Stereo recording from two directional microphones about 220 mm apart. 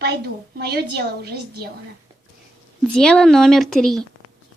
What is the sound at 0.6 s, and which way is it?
Speech, 45° right (ahead or behind).